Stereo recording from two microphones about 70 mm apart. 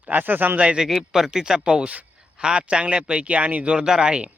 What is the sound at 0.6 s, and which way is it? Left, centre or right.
Speech, centre.